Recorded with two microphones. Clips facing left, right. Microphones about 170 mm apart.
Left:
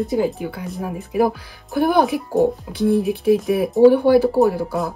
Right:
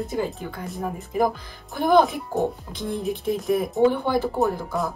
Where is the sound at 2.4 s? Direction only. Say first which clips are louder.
Left 8 dB; 5° left (ahead or behind).